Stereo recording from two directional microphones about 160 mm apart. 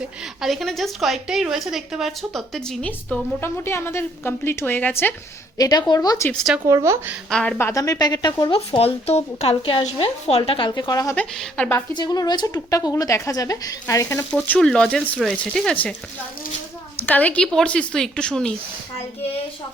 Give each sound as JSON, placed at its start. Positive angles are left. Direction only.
{"t": 0.4, "sound": "a woman's voice", "side_deg": 0}
{"t": 5.5, "sound": "speech", "side_deg": 25}
{"t": 6.3, "sound": "a woman's voice", "side_deg": 0}
{"t": 6.7, "sound": "speech", "side_deg": -20}
{"t": 7.3, "sound": "a woman's voice", "side_deg": 5}
{"t": 7.7, "sound": "speech", "side_deg": 20}
{"t": 11.1, "sound": "a woman's voice", "side_deg": 10}
{"t": 11.9, "sound": "a woman's voice", "side_deg": 25}
{"t": 17.1, "sound": "a woman's voice", "side_deg": 10}